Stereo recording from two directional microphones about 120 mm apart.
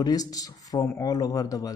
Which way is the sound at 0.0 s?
30° left (ahead or behind).